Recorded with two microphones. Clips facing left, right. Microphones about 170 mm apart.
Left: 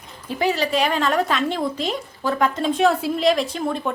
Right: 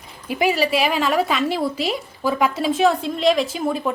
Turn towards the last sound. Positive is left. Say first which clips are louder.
# right 2 dB
turn(degrees=-5)  # may be behind; listen again after turning